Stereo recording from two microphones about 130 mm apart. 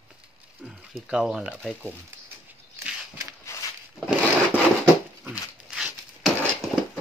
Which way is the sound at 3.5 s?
20° left (ahead or behind).